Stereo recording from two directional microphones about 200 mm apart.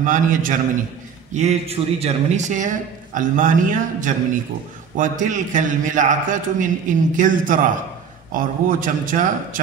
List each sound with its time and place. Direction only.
0.0 s a man's voice: 40° right (ahead or behind)